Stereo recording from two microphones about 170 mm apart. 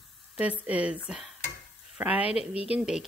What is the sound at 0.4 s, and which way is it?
Speech, 5° right (ahead or behind).